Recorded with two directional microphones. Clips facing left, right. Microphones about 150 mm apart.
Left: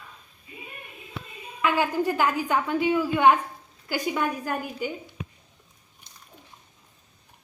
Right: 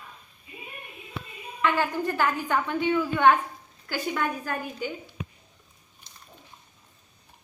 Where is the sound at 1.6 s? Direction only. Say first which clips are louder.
Left 2 dB; 10° left (ahead or behind).